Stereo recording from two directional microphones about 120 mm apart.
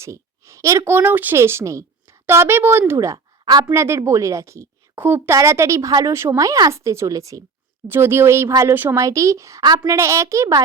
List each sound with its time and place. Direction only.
0.0 s speech: 25° right (ahead or behind)